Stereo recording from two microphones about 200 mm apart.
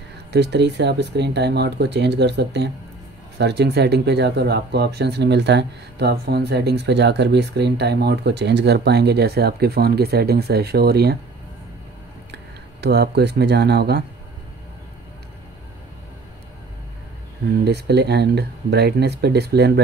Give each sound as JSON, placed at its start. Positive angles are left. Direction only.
{"t": 0.3, "sound": "speech", "side_deg": -55}
{"t": 12.8, "sound": "speech", "side_deg": -55}
{"t": 17.5, "sound": "speech", "side_deg": -55}